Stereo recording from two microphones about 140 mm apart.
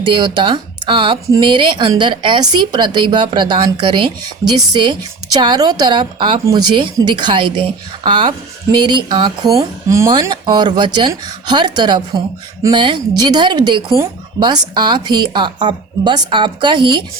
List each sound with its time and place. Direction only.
0.0 s a woman's voice: 35° right (ahead or behind); by 10.1 s 20° right (ahead or behind)
10.1 s a woman's voice: 35° right (ahead or behind)